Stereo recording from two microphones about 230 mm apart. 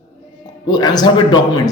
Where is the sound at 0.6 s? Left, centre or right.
Centre.